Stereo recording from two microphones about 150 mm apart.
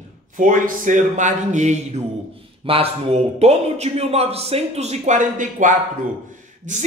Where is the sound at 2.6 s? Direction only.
40° right (ahead or behind).